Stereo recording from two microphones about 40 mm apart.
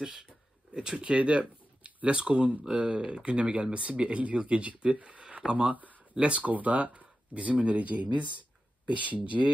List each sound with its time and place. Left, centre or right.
0.0 s speech: centre
0.9 s speech: right